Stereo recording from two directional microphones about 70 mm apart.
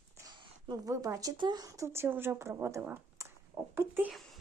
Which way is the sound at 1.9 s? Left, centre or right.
Right.